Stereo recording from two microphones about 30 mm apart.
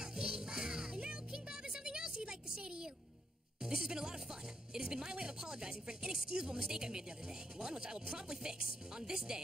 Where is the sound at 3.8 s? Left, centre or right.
Right.